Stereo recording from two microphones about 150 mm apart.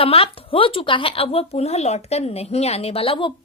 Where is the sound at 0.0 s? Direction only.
40° left (ahead or behind).